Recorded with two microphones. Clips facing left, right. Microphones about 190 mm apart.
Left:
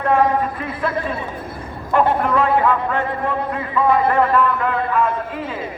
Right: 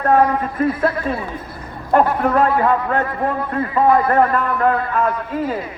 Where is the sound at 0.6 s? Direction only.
45° right (ahead or behind).